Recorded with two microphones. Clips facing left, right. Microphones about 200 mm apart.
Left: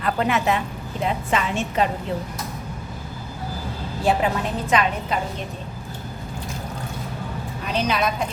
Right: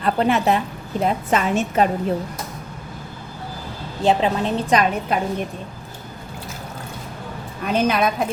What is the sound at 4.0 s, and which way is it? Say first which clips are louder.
Speech: right 3 dB; 25° right (ahead or behind).